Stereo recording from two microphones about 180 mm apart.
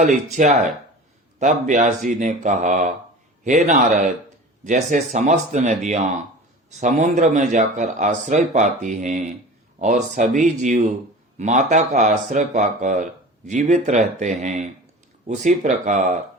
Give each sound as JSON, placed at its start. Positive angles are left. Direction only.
{"t": 0.0, "sound": "a man's voice", "side_deg": -40}